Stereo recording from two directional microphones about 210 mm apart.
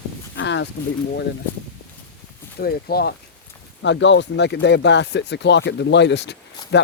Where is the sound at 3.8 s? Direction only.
60° left (ahead or behind).